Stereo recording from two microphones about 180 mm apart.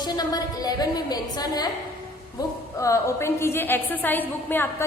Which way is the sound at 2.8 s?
15° left (ahead or behind).